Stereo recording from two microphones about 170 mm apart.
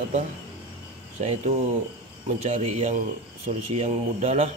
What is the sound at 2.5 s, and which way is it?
Speech, 45° right (ahead or behind).